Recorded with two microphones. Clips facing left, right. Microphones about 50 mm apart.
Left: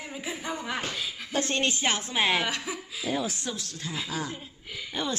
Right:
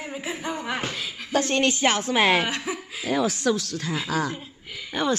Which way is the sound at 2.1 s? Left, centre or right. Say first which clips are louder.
Right 5 dB; centre.